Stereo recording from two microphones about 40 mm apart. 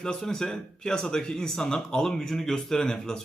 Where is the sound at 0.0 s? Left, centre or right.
Centre.